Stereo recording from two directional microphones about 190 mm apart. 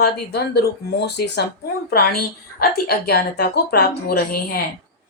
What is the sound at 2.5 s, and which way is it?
Speech, 55° left (ahead or behind).